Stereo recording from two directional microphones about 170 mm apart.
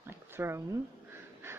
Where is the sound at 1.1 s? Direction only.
15° right (ahead or behind).